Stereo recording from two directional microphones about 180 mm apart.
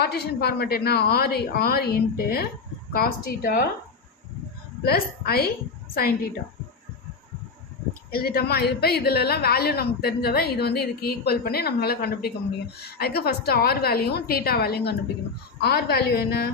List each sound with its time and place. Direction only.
0.0 s a woman's voice: 60° left (ahead or behind)
4.8 s a woman's voice: 60° left (ahead or behind)
8.1 s a woman's voice: 55° left (ahead or behind)